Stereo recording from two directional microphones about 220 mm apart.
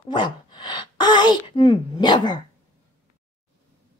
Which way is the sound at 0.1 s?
20° left (ahead or behind).